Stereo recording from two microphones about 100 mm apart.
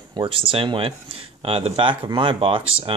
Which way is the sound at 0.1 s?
55° right (ahead or behind).